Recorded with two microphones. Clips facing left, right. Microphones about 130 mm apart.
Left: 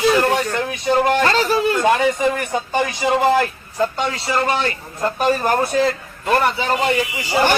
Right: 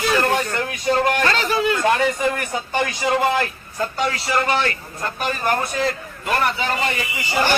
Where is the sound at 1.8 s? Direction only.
15° left (ahead or behind).